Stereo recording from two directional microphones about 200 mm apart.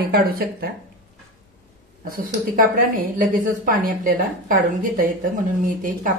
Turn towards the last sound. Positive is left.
turn(degrees=-45)  # may be behind; listen again after turning